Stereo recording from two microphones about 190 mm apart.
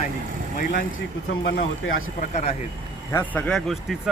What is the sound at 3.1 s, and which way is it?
Speech, 10° left (ahead or behind).